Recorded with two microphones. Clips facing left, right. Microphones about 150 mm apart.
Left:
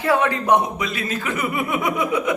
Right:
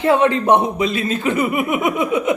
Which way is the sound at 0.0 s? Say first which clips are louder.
Right 5 dB; 25° right (ahead or behind).